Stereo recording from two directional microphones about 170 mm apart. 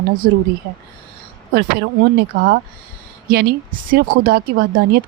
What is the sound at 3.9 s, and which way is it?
Speech, 65° right (ahead or behind).